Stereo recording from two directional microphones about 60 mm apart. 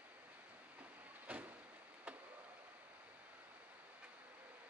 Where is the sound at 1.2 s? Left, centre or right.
Right.